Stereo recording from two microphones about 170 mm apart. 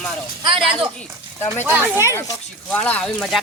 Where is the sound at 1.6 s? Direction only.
10° right (ahead or behind).